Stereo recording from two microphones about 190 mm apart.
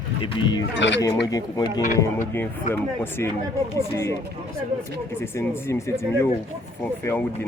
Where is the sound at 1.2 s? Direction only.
20° left (ahead or behind).